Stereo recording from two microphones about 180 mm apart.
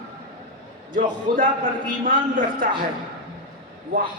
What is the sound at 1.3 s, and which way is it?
A man's voice, 55° right (ahead or behind).